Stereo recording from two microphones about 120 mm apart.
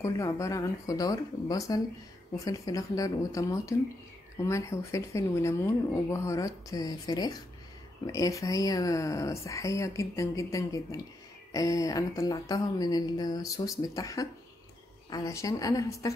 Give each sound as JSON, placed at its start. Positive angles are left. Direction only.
{"t": 0.0, "sound": "speech", "side_deg": 25}